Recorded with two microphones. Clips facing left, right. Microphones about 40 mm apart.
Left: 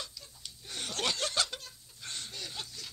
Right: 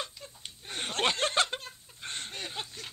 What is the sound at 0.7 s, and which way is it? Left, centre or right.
Speech, right.